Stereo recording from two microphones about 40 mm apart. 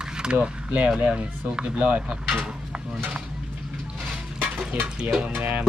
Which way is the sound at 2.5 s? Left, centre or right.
Right.